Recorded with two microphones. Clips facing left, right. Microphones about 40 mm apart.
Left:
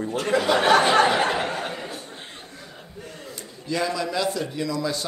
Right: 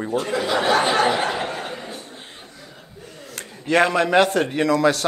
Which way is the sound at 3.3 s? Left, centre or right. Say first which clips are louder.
Right 9 dB; right.